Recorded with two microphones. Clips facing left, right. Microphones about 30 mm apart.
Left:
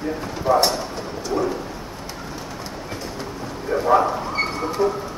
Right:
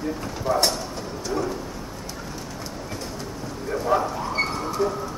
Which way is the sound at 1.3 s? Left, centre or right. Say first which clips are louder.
Left 4 dB; centre.